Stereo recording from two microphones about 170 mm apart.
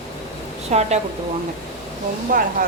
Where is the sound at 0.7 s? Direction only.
45° right (ahead or behind).